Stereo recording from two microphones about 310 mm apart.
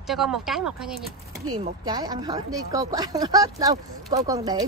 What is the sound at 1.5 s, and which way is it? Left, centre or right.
Speech, centre.